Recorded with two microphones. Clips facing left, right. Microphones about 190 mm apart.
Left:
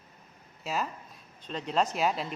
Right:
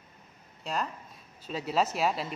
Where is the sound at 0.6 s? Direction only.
5° left (ahead or behind).